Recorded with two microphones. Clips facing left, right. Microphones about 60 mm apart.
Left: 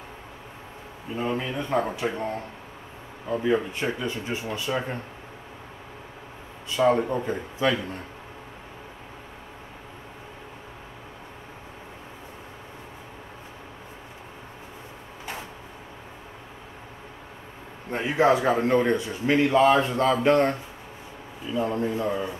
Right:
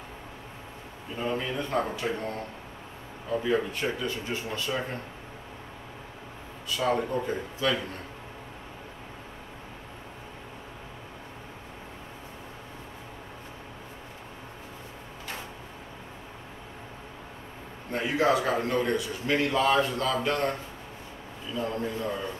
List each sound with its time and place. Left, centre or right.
1.1 s speech: centre
3.3 s speech: centre
6.9 s a man's voice: centre
17.9 s a man's voice: left
21.5 s speech: centre